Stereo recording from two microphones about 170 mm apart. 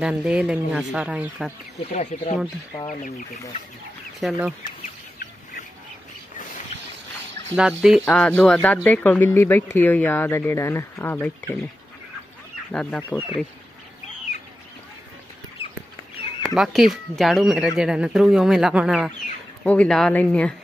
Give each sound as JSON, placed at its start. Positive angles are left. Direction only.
{"t": 0.0, "sound": "speech", "side_deg": -5}
{"t": 1.8, "sound": "speech", "side_deg": 40}
{"t": 4.2, "sound": "speech", "side_deg": -5}
{"t": 7.5, "sound": "speech", "side_deg": -5}
{"t": 8.0, "sound": "speech", "side_deg": 5}
{"t": 12.7, "sound": "speech", "side_deg": 5}
{"t": 16.4, "sound": "speech", "side_deg": 0}
{"t": 19.6, "sound": "speech", "side_deg": 10}